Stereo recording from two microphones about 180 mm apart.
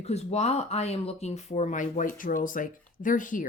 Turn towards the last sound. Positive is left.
turn(degrees=50)  # may be behind; listen again after turning